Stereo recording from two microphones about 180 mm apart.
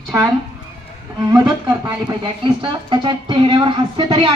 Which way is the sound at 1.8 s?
25° right (ahead or behind).